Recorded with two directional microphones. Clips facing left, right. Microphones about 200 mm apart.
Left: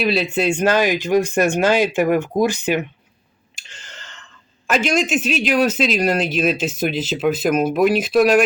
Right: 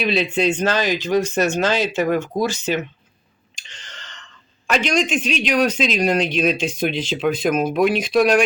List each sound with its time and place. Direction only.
0.0 s speech: 5° left (ahead or behind)